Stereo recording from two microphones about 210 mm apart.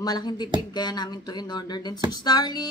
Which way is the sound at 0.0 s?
20° left (ahead or behind).